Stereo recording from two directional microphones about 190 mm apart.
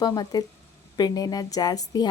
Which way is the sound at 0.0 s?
20° left (ahead or behind).